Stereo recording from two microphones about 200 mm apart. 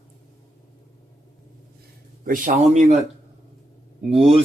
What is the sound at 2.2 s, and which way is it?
Speech, 40° right (ahead or behind).